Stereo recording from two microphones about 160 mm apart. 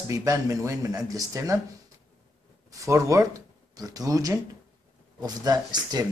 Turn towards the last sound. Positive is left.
turn(degrees=-25)  # may be behind; listen again after turning